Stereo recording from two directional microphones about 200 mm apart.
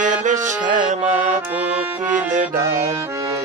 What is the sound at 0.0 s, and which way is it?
Music, 40° right (ahead or behind).